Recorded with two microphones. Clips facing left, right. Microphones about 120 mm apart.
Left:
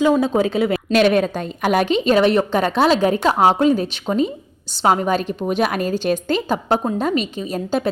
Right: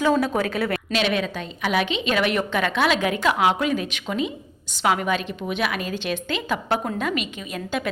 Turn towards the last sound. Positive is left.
turn(degrees=35)  # may be behind; listen again after turning